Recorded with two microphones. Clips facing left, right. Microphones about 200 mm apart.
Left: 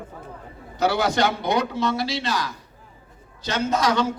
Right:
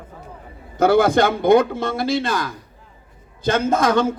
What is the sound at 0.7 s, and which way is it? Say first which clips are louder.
A man's voice: right 7 dB; 50° right (ahead or behind).